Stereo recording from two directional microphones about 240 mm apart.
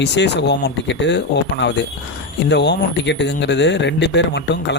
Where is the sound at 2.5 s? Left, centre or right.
Left.